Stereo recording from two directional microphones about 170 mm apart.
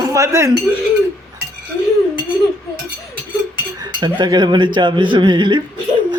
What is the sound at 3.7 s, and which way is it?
Speech, 25° right (ahead or behind).